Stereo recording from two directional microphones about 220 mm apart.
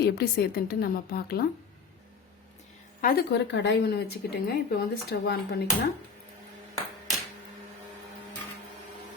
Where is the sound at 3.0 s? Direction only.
40° left (ahead or behind).